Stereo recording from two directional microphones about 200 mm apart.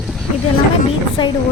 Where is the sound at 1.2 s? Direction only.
25° left (ahead or behind).